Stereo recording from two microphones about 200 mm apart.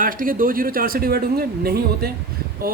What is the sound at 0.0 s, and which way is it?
A man's voice, 45° right (ahead or behind).